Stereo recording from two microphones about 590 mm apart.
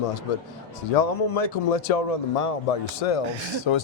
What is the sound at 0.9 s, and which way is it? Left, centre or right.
Speech, left.